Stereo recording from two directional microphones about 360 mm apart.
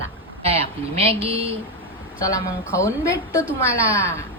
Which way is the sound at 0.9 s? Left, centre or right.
Centre.